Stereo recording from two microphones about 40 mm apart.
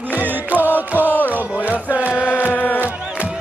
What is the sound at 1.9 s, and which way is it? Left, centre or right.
Chant, right.